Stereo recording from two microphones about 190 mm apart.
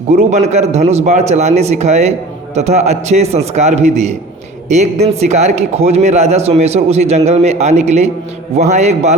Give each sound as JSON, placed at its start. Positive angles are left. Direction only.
{"t": 0.3, "sound": "a man's voice", "side_deg": -35}